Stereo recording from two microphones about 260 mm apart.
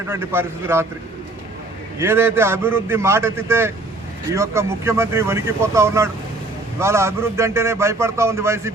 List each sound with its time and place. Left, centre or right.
0.1 s a man's voice: centre
2.0 s a man's voice: centre